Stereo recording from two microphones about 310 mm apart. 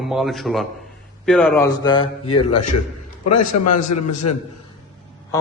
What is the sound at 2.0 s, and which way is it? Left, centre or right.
A man's voice, left.